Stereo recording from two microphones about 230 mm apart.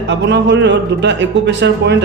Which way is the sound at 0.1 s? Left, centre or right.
Right.